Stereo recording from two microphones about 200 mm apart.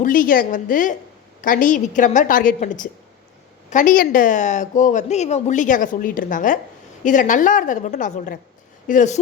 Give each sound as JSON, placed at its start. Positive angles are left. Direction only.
{"t": 0.0, "sound": "a woman's voice", "side_deg": 45}